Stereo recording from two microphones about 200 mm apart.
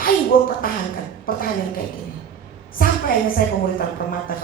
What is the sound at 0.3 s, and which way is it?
A woman's voice, 45° left (ahead or behind).